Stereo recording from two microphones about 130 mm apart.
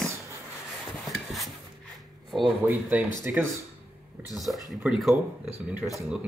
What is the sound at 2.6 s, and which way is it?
Speech, 15° right (ahead or behind).